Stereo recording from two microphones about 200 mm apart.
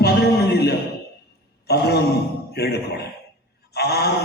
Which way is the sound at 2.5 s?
55° left (ahead or behind).